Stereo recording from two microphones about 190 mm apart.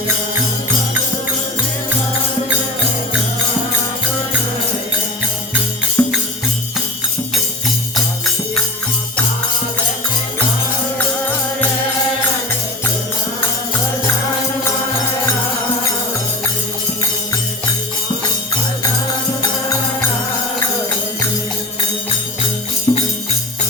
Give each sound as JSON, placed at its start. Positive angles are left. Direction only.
{"t": 6.0, "sound": "music", "side_deg": 5}
{"t": 22.9, "sound": "music", "side_deg": 30}